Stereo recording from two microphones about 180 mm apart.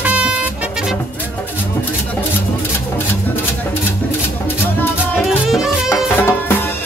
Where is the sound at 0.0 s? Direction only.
5° right (ahead or behind).